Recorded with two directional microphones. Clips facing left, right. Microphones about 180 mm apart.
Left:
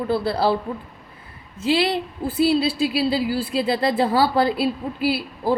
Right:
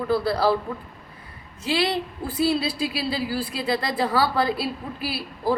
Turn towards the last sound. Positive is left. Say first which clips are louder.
# left 4 dB
turn(degrees=25)  # may be behind; listen again after turning